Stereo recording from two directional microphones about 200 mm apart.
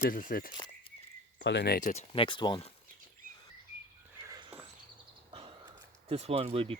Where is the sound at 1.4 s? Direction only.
60° left (ahead or behind).